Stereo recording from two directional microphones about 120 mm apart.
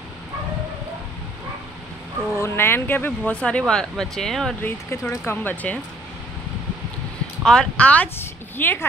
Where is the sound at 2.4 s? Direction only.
20° left (ahead or behind); by 4.6 s centre (ahead or behind).